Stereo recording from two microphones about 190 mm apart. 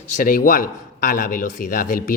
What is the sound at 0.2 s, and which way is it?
A man's voice, 45° left (ahead or behind).